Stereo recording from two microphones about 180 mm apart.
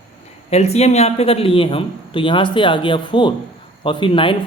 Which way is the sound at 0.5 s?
35° left (ahead or behind).